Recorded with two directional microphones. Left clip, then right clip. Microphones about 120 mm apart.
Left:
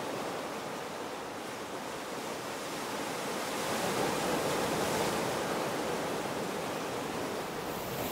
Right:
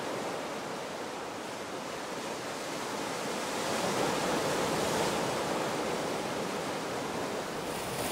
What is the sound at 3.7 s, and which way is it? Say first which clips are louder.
Waves: right 1 dB; 5° left (ahead or behind).